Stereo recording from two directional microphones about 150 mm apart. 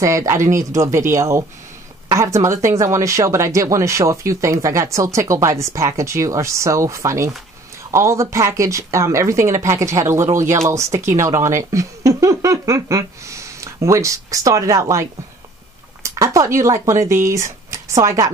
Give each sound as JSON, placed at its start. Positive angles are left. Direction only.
{"t": 0.0, "sound": "speech", "side_deg": -20}